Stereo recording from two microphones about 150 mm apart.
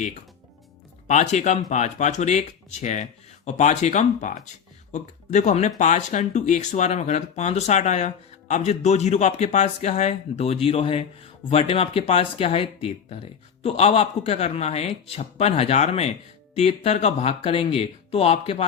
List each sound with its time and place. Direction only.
1.0 s speech: 50° left (ahead or behind)